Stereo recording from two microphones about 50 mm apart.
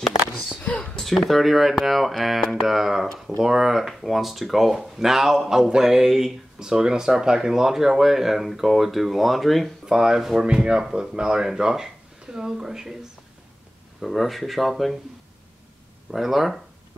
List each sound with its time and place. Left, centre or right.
0.6 s a sound: left
0.9 s speech: centre
9.8 s speech: centre
14.0 s speech: centre
16.1 s speech: centre